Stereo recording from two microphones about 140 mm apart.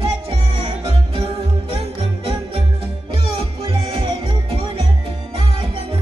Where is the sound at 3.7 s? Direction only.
40° right (ahead or behind).